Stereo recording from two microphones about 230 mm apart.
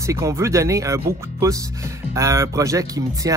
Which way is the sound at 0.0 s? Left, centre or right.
Centre.